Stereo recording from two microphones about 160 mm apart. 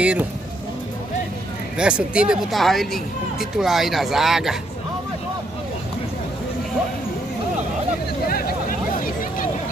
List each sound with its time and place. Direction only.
0.0 s speech: 10° right (ahead or behind)
1.8 s speech: 5° right (ahead or behind)
8.3 s vehicle: 70° left (ahead or behind)